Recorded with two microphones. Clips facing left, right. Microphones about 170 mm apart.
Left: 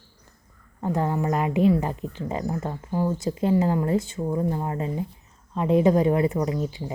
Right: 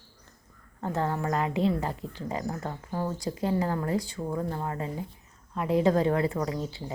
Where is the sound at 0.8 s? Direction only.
15° left (ahead or behind).